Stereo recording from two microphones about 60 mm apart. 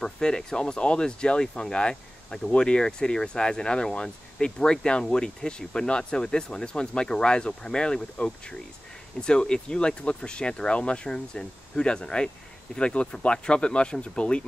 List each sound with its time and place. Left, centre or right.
0.0 s speech: centre